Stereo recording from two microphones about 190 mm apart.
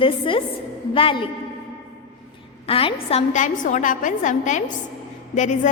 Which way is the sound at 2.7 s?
30° left (ahead or behind).